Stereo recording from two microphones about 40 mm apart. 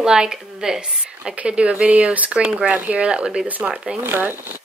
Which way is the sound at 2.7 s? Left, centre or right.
Right.